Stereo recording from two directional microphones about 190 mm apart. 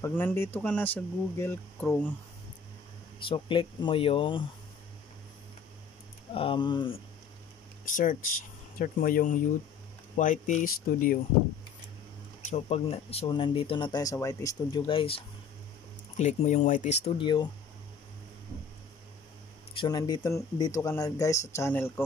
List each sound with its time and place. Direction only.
0.0 s speech: 10° left (ahead or behind)
3.3 s speech: 25° left (ahead or behind)
6.3 s speech: 30° left (ahead or behind)
7.9 s speech: 45° left (ahead or behind)
12.4 s speech: 35° left (ahead or behind); by 14.6 s 15° left (ahead or behind)
14.9 s speech: 30° left (ahead or behind)
19.7 s speech: 25° left (ahead or behind)